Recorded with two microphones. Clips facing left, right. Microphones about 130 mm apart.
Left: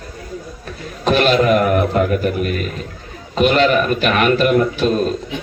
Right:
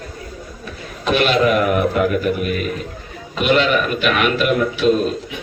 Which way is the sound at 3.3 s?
35° left (ahead or behind).